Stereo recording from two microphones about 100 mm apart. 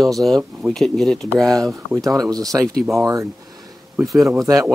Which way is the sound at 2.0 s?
35° right (ahead or behind).